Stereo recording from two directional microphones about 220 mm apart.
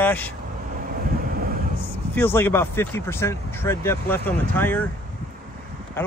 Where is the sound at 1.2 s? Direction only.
40° right (ahead or behind).